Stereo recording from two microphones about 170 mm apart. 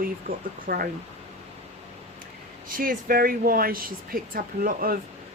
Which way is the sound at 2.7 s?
55° right (ahead or behind).